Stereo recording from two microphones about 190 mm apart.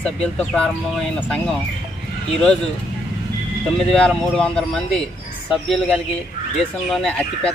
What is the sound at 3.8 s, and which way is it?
Speech, 5° left (ahead or behind).